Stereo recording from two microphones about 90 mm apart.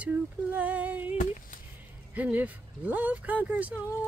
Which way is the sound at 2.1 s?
15° right (ahead or behind).